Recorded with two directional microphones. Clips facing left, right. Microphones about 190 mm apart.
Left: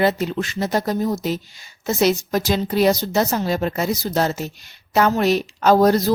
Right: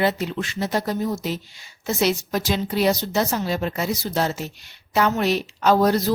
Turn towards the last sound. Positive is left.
turn(degrees=40)  # may be behind; listen again after turning